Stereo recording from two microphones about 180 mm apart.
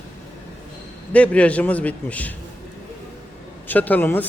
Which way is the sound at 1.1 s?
5° left (ahead or behind).